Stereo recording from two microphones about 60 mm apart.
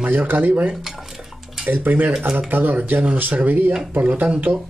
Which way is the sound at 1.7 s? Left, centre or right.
Right.